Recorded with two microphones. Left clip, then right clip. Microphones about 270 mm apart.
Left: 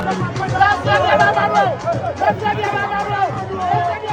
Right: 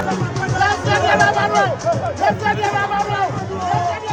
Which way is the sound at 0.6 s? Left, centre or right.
Right.